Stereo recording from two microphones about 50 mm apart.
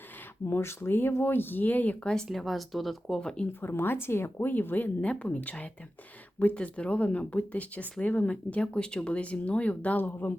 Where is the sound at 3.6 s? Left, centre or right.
Left.